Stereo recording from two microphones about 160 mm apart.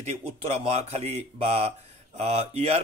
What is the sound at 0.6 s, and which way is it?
Speech, 40° right (ahead or behind).